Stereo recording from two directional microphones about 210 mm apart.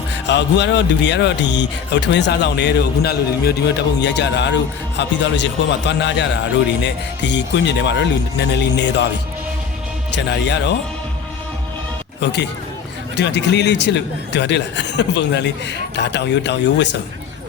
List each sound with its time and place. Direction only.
0.3 s a man's voice: 55° left (ahead or behind)
10.2 s a man's voice: 55° left (ahead or behind)
12.2 s a man's voice: 55° left (ahead or behind)